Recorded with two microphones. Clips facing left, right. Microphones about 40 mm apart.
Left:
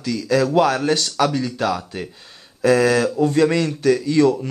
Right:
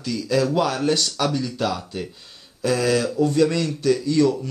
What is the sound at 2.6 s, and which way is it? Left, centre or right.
A man's voice, centre.